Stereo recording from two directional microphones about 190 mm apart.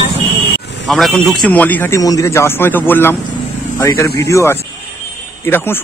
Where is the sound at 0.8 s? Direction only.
Centre (ahead or behind).